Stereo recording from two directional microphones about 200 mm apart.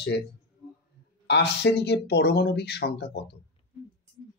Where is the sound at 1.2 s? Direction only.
55° left (ahead or behind).